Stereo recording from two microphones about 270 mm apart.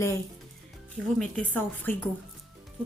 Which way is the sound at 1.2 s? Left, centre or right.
Centre.